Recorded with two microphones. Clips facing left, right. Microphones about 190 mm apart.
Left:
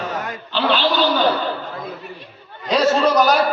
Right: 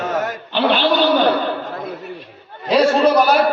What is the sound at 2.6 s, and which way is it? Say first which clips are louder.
Speech: right 3 dB; 10° right (ahead or behind).